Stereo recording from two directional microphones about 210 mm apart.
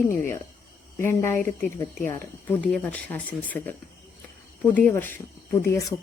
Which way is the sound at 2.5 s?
5° left (ahead or behind).